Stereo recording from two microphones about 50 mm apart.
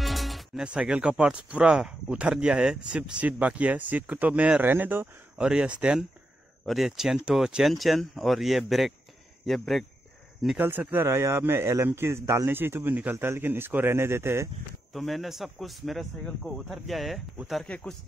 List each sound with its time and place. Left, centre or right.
0.0 s music: centre
0.6 s speech: centre
4.6 s speech: right
5.4 s speech: centre
6.7 s speech: centre
7.6 s speech: centre
10.6 s speech: right
11.1 s speech: right
14.9 s speech: centre
17.7 s a man's voice: left